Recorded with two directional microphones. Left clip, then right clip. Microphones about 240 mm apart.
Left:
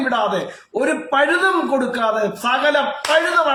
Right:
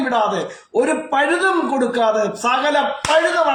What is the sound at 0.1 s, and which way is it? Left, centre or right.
Speech, centre.